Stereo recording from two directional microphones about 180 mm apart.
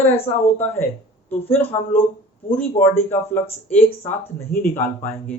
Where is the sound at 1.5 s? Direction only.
10° left (ahead or behind).